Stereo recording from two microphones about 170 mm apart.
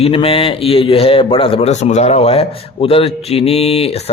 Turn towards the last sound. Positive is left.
turn(degrees=35)  # may be behind; listen again after turning